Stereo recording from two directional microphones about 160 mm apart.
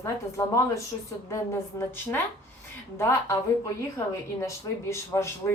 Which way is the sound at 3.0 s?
15° left (ahead or behind).